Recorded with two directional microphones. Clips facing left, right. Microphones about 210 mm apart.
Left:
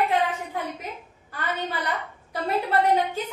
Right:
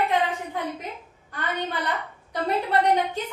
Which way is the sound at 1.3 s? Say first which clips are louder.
Right 1 dB; 5° left (ahead or behind).